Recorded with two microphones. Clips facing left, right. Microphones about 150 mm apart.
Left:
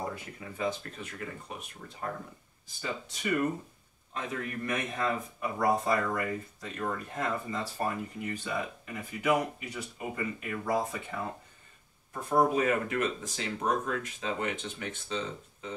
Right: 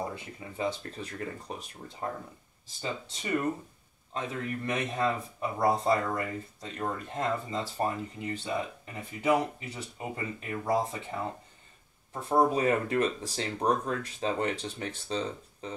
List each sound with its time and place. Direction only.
0.1 s speech: 30° right (ahead or behind)
2.6 s speech: 25° right (ahead or behind)